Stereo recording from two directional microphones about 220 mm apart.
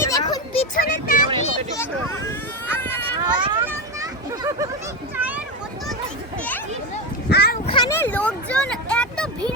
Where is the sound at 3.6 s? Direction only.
15° right (ahead or behind).